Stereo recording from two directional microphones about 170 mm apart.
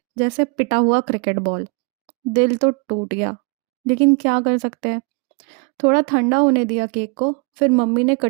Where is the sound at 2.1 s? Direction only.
45° right (ahead or behind).